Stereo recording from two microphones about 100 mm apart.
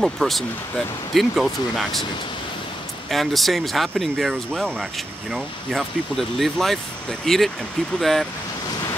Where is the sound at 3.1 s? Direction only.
Centre (ahead or behind).